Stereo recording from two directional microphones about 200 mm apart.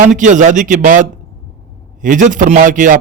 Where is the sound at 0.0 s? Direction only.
40° right (ahead or behind).